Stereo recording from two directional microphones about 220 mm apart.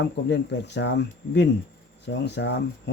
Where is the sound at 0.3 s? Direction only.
50° left (ahead or behind).